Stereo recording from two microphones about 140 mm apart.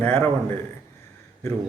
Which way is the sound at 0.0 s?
15° left (ahead or behind).